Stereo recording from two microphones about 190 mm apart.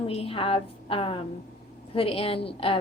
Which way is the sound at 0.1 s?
30° left (ahead or behind).